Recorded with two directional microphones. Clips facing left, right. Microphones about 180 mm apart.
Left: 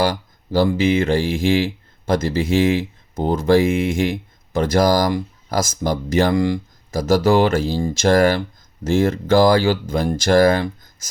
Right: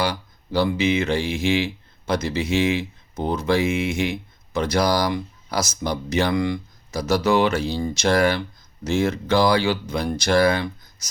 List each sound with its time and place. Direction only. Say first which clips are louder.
0.0 s speech: left 5 dB; 45° left (ahead or behind)